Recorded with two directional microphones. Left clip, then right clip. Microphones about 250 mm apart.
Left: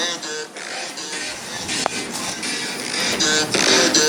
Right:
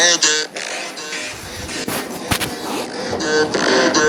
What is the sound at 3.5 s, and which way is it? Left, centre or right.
Music, centre.